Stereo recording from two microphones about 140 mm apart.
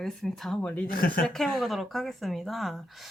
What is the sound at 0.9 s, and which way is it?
Speech, 90° left.